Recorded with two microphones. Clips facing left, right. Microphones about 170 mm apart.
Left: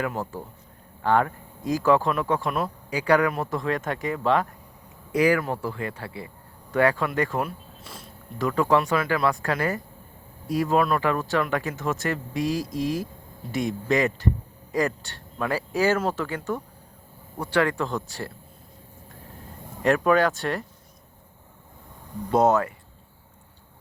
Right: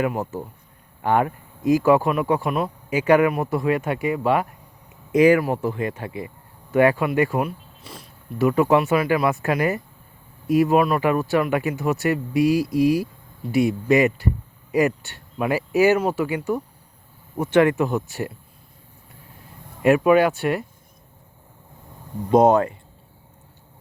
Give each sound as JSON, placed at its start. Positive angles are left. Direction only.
{"t": 0.0, "sound": "speech", "side_deg": -20}
{"t": 2.9, "sound": "speech", "side_deg": -20}
{"t": 5.1, "sound": "speech", "side_deg": -20}
{"t": 19.8, "sound": "speech", "side_deg": -15}
{"t": 22.3, "sound": "speech", "side_deg": -15}